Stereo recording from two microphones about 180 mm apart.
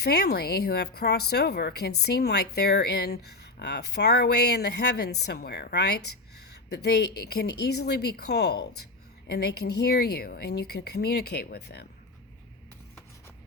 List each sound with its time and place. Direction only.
0.0 s speech: 65° left (ahead or behind)